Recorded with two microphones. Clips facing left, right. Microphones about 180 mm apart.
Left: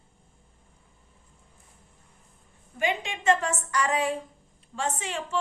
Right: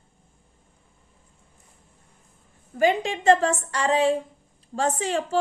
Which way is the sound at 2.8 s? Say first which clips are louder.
Right 8 dB; 35° right (ahead or behind).